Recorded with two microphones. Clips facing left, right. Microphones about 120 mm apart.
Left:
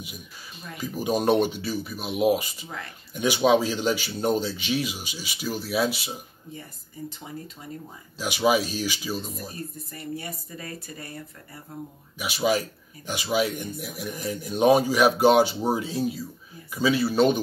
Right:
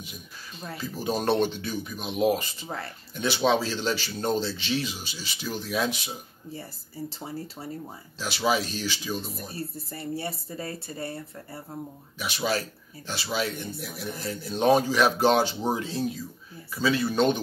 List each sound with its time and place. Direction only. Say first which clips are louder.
0.7 s speech: left 3 dB; 15° left (ahead or behind)
2.6 s speech: right 3 dB; 35° right (ahead or behind)
3.2 s speech: left 3 dB; 10° left (ahead or behind)
6.5 s speech: right 2 dB; 35° right (ahead or behind)
8.2 s speech: left 4 dB; 15° left (ahead or behind)
9.5 s speech: right 2 dB; 30° right (ahead or behind)
12.2 s speech: left 4 dB; 10° left (ahead or behind)